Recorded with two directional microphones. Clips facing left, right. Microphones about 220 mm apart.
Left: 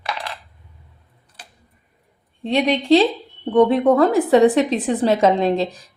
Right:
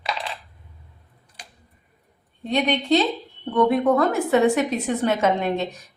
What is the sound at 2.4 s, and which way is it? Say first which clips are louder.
A woman's voice: left 4 dB; 30° left (ahead or behind).